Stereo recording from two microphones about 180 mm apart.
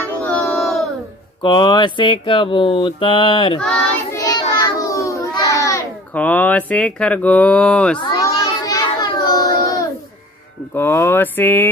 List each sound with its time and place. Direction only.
0.2 s a sound: 10° left (ahead or behind)
1.4 s mantra: 25° left (ahead or behind)
3.6 s child singing: 5° left (ahead or behind)
4.2 s a sound: 20° left (ahead or behind)
8.0 s child singing: 20° left (ahead or behind)
10.7 s mantra: 10° left (ahead or behind)